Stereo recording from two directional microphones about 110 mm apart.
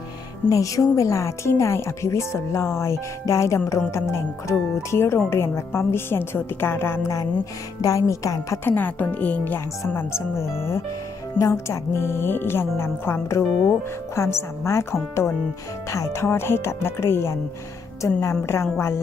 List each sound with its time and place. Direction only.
0.5 s a woman's voice: 30° left (ahead or behind)
8.7 s a woman's voice: 15° left (ahead or behind)
18.4 s a woman's voice: 25° left (ahead or behind)